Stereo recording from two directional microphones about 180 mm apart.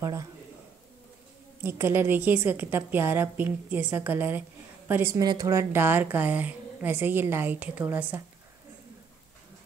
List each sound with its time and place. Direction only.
0.0 s a woman's voice: 15° right (ahead or behind)
1.6 s a woman's voice: 15° right (ahead or behind)